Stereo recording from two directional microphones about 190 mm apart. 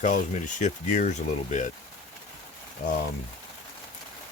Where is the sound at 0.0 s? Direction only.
40° left (ahead or behind).